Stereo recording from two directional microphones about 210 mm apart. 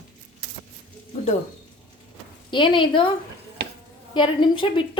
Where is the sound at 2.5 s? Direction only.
25° left (ahead or behind).